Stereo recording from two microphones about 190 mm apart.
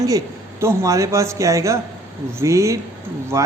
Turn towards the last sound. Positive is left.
turn(degrees=-15)  # may be behind; listen again after turning